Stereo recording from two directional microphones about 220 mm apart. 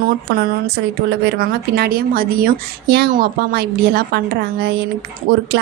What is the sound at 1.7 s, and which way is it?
Speech, 45° right (ahead or behind).